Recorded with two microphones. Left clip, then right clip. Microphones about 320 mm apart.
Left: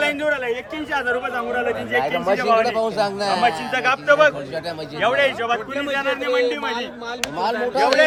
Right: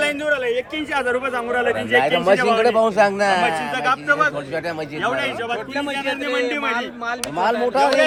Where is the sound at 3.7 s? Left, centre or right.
Centre.